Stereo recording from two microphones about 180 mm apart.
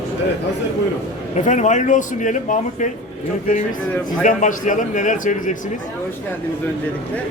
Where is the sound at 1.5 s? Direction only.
40° left (ahead or behind).